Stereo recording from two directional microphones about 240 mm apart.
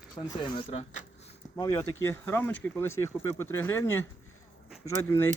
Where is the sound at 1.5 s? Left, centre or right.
Centre.